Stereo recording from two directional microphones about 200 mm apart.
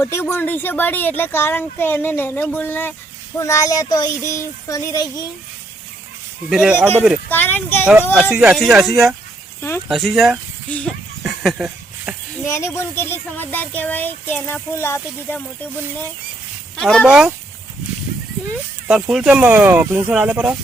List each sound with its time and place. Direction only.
0.0 s speech: 10° left (ahead or behind)
6.5 s speech: 5° right (ahead or behind)
7.3 s speech: 10° left (ahead or behind)
8.3 s speech: 5° right (ahead or behind)
11.2 s a sound: 5° right (ahead or behind)
12.5 s speech: 15° left (ahead or behind); by 17.3 s 5° right (ahead or behind)
18.9 s speech: 5° right (ahead or behind)